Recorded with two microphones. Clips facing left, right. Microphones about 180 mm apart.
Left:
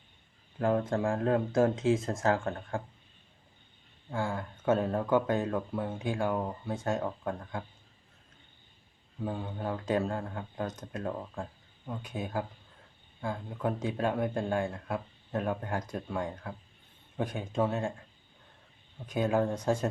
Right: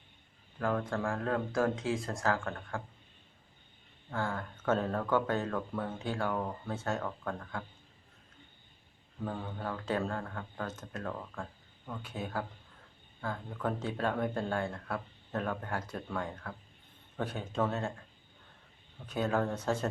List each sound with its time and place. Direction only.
0.6 s speech: 20° left (ahead or behind)
4.1 s speech: 10° left (ahead or behind)
9.2 s speech: 15° left (ahead or behind)
19.0 s speech: 15° left (ahead or behind)